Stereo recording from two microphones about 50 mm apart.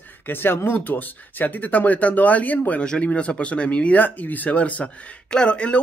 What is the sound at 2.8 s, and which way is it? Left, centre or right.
Speech, left.